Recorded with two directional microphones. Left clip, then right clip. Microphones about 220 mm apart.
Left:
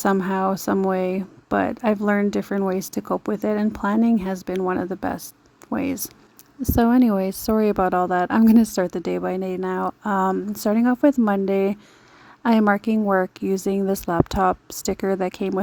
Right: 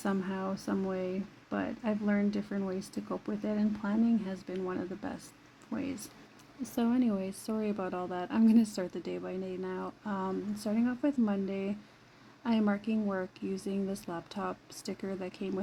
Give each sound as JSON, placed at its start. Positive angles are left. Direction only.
{"t": 0.0, "sound": "speech", "side_deg": 50}